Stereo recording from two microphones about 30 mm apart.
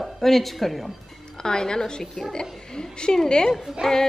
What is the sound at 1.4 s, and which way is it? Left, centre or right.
A woman's voice, left.